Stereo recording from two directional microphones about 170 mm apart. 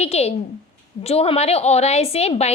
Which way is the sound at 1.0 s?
35° left (ahead or behind).